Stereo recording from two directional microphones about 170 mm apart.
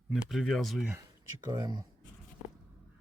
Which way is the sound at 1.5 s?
25° right (ahead or behind).